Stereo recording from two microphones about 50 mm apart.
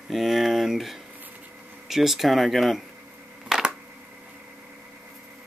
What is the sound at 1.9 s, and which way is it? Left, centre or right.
Speech, centre.